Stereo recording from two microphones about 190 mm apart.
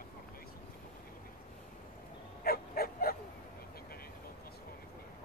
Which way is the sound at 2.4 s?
50° left (ahead or behind).